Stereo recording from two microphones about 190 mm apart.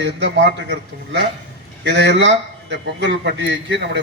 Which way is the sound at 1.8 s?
65° right (ahead or behind).